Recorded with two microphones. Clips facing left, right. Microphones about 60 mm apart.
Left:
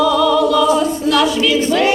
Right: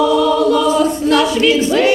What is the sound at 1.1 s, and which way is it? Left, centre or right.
Speech, right.